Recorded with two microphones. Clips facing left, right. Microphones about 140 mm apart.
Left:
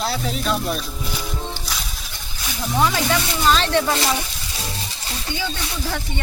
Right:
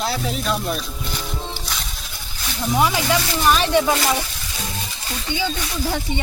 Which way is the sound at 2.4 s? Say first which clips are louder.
Right 1 dB; centre (ahead or behind).